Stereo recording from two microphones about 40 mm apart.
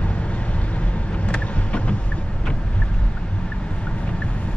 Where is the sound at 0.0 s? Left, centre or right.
Left.